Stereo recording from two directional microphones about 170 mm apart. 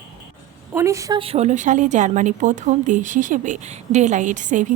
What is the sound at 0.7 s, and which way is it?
Speech, 20° right (ahead or behind).